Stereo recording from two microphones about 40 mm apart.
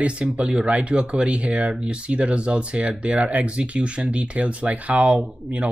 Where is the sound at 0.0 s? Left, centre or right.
Right.